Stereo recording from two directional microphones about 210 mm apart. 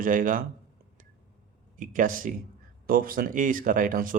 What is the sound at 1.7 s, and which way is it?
Speech, 40° right (ahead or behind).